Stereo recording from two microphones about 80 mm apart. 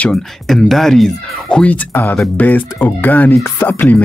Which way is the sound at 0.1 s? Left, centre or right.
Centre.